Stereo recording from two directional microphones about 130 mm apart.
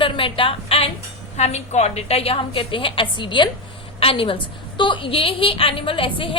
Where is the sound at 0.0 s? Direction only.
40° left (ahead or behind).